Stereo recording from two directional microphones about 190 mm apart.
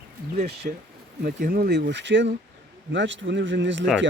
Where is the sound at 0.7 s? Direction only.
45° right (ahead or behind); by 3.8 s 75° right (ahead or behind).